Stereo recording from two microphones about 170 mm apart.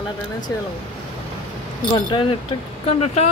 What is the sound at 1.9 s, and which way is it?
Speech, 30° left (ahead or behind).